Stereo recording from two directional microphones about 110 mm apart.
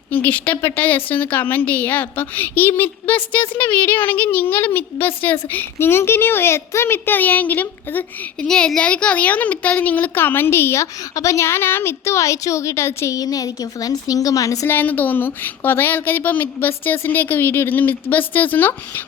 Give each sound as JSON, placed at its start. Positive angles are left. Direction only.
{"t": 0.1, "sound": "a woman's voice", "side_deg": 15}
{"t": 14.7, "sound": "a woman's voice", "side_deg": 15}